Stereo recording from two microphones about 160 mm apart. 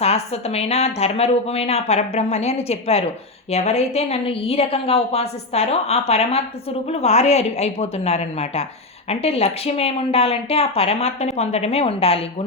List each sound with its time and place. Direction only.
0.0 s a woman's voice: 40° left (ahead or behind)